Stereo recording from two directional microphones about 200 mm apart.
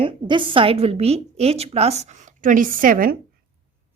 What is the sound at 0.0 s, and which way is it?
A woman's voice, 25° right (ahead or behind).